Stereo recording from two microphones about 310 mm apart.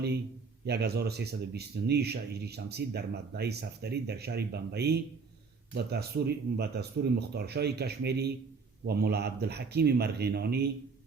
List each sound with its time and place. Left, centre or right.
0.6 s speech: right